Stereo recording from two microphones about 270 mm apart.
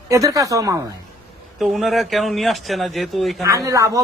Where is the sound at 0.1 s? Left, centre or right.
Centre.